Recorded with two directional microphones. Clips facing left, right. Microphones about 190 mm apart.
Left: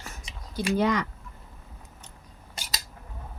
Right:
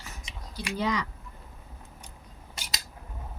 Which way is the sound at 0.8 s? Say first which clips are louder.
Left 4 dB; 55° left (ahead or behind).